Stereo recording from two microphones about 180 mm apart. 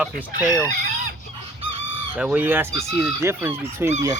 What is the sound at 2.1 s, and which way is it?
Speech, 10° right (ahead or behind).